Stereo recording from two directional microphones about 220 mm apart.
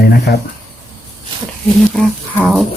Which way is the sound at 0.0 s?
45° left (ahead or behind).